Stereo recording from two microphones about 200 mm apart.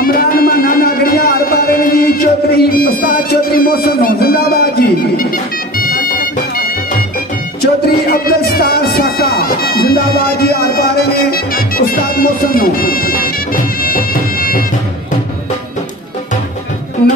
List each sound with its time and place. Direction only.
0.0 s a sound: 45° left (ahead or behind)
5.8 s music: 45° left (ahead or behind)
7.6 s music: 50° left (ahead or behind)
13.8 s bagpipes: 45° left (ahead or behind)